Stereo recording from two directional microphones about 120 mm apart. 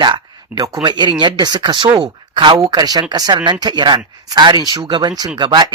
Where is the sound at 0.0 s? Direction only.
35° right (ahead or behind).